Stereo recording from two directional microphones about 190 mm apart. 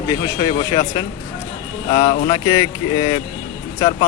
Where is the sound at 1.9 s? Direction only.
35° left (ahead or behind).